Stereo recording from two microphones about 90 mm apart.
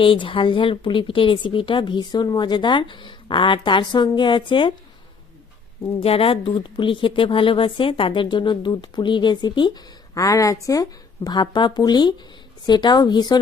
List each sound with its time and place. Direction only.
0.0 s speech: 75° left (ahead or behind)
6.0 s speech: 90° left; by 13.4 s 50° left (ahead or behind)